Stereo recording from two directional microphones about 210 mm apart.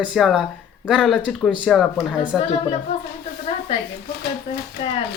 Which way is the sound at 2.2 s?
25° left (ahead or behind).